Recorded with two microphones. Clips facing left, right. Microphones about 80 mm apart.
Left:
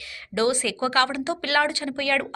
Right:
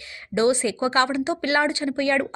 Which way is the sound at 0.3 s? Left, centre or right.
Right.